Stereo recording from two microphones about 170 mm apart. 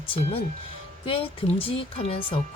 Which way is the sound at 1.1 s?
35° left (ahead or behind).